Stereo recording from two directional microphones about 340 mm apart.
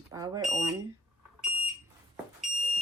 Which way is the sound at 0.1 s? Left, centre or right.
Centre.